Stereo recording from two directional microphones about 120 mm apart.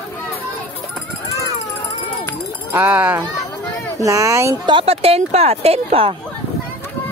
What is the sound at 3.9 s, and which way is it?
Speech, 25° right (ahead or behind).